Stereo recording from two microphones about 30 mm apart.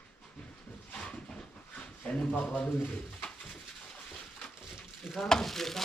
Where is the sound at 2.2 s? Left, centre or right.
Left.